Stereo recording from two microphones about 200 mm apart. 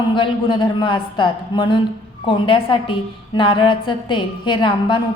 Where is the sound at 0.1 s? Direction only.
25° left (ahead or behind).